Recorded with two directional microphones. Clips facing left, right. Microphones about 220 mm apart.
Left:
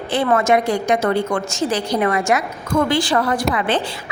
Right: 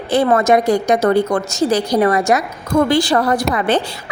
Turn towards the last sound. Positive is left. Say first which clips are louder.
# right 3 dB
turn(degrees=-40)  # may be behind; listen again after turning